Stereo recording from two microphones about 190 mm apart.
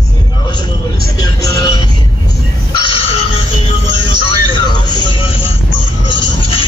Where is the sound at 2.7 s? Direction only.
25° left (ahead or behind).